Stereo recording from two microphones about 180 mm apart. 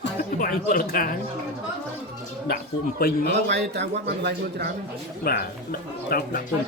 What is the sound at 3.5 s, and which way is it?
Speech, 70° right (ahead or behind).